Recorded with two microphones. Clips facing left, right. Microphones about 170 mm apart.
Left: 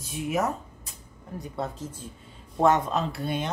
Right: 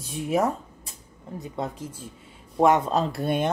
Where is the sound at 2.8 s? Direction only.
35° right (ahead or behind).